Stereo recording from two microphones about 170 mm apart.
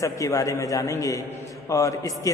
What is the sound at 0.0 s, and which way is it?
A man's voice, 20° left (ahead or behind).